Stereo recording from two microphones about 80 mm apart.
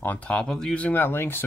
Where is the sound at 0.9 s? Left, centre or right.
Left.